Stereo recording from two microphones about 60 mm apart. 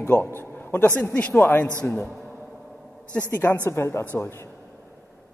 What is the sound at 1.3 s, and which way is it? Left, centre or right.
Speech, left.